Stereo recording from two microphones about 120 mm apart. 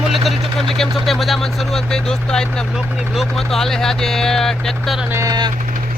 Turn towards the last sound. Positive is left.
turn(degrees=-35)  # may be behind; listen again after turning